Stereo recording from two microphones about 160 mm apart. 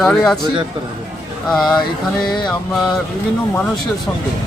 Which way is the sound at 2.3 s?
25° left (ahead or behind).